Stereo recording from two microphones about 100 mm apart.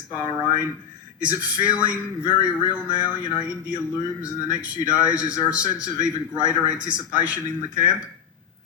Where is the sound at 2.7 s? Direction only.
15° right (ahead or behind).